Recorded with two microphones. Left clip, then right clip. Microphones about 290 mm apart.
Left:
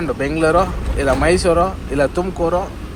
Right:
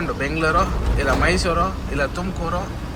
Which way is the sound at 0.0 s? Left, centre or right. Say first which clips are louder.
Left 4 dB; centre.